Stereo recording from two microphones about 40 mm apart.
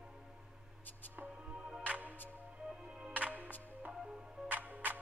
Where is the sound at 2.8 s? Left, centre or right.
Centre.